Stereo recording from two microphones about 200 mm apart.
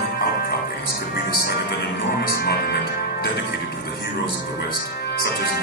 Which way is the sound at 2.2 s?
55° left (ahead or behind).